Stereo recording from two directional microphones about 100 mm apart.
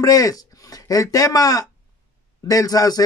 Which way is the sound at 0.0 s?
35° left (ahead or behind).